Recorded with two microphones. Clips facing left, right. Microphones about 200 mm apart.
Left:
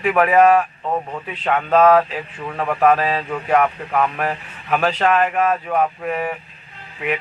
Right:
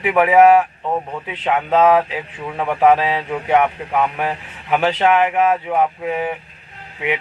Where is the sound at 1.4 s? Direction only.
20° right (ahead or behind).